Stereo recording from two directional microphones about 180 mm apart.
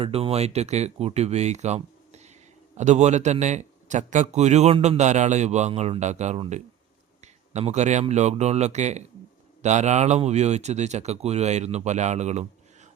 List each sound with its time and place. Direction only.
0.0 s a man's voice: 35° right (ahead or behind)